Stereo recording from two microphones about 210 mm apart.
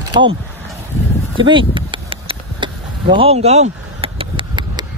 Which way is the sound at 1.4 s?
25° right (ahead or behind).